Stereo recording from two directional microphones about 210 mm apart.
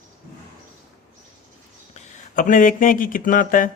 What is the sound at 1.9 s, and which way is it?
Speech, 40° left (ahead or behind).